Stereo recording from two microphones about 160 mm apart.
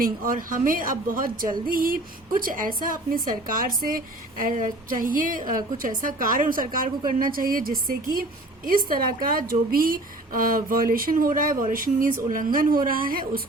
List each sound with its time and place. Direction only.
0.0 s a woman's voice: 60° right (ahead or behind)